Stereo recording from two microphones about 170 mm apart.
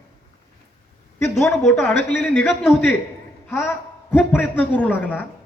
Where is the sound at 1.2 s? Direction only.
15° left (ahead or behind).